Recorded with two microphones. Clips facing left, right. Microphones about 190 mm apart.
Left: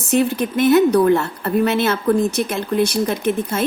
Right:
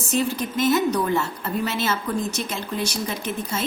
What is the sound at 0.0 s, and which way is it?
A woman's voice, 60° left (ahead or behind).